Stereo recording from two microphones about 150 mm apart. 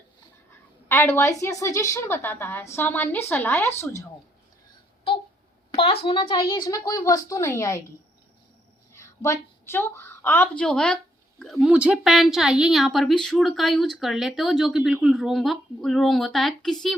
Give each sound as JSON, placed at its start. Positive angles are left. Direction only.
{"t": 0.9, "sound": "a woman's voice", "side_deg": 15}
{"t": 5.7, "sound": "a woman's voice", "side_deg": 40}
{"t": 6.5, "sound": "a woman's voice", "side_deg": 20}
{"t": 9.0, "sound": "a woman's voice", "side_deg": 20}